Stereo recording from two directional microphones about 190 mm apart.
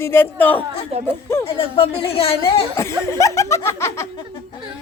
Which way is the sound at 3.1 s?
15° left (ahead or behind).